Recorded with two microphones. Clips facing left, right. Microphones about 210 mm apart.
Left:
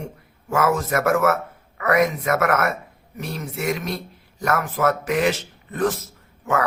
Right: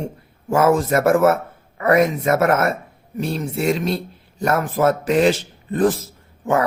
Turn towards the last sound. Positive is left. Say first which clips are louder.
# right 4 dB
turn(degrees=-30)  # may be behind; listen again after turning